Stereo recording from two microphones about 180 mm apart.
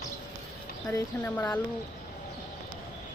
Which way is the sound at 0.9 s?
10° left (ahead or behind).